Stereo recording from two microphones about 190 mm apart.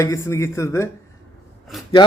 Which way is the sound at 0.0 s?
15° left (ahead or behind).